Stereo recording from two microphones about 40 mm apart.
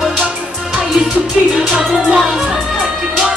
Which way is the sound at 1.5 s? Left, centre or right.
Centre.